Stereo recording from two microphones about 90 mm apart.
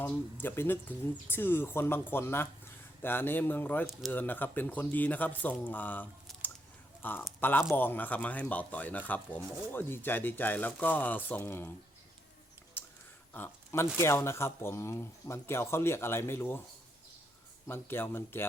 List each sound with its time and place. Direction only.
0.4 s speech: 25° left (ahead or behind)
12.8 s a sound: 25° left (ahead or behind)
13.3 s speech: 25° left (ahead or behind)
17.7 s speech: 25° left (ahead or behind)